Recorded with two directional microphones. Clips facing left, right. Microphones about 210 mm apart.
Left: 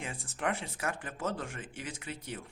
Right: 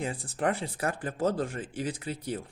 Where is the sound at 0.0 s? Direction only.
35° right (ahead or behind).